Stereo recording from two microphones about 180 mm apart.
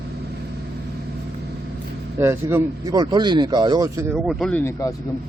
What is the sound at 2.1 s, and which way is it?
Speech, 15° right (ahead or behind).